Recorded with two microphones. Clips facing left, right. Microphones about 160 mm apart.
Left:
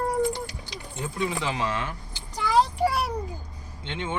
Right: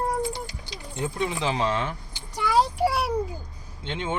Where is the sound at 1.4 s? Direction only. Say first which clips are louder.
Right 3 dB; 25° right (ahead or behind).